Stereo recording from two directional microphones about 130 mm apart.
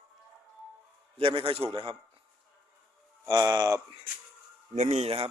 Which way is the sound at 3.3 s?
25° right (ahead or behind).